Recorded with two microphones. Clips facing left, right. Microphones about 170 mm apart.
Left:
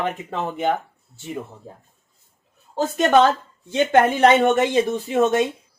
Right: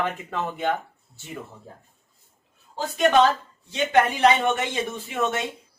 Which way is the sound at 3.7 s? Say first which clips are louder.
Left 4 dB; 50° left (ahead or behind).